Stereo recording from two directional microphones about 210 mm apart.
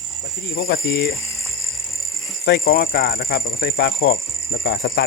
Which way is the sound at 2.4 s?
45° left (ahead or behind).